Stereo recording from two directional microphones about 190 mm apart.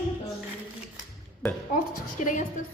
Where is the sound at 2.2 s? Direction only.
40° left (ahead or behind).